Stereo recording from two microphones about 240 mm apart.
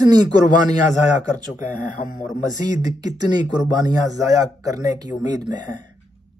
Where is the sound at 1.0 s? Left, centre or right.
Left.